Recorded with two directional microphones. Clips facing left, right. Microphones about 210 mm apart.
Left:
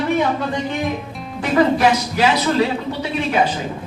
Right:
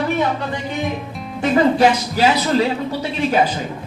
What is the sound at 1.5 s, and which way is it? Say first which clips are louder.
Speech: right 1 dB; 30° right (ahead or behind).